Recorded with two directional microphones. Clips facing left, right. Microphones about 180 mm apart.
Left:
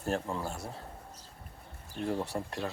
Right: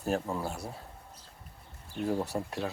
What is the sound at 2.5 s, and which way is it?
Speech, 10° right (ahead or behind).